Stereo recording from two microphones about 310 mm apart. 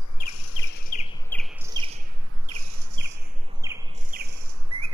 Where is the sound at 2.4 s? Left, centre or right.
Right.